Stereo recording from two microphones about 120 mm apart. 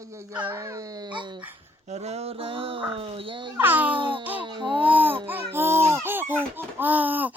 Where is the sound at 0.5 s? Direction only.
30° right (ahead or behind).